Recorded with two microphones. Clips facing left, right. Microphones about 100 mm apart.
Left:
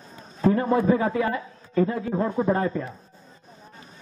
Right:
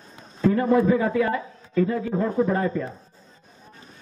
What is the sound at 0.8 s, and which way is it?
A man's voice, 30° left (ahead or behind).